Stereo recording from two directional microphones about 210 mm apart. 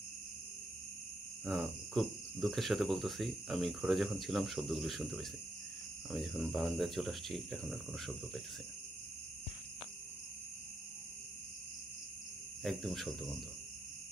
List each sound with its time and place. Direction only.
1.4 s speech: centre (ahead or behind)
12.6 s speech: centre (ahead or behind)